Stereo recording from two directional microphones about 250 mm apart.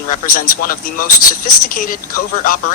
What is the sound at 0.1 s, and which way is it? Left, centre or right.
Speech, left.